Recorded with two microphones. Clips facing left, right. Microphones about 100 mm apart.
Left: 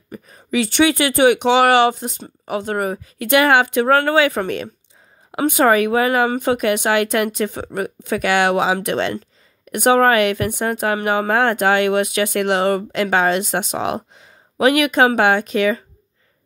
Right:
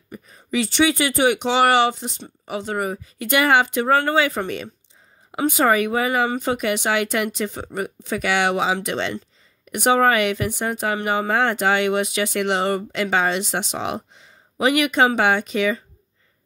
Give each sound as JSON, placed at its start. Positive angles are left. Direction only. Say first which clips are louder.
{"t": 0.1, "sound": "speech", "louder": "left 3 dB", "side_deg": 55}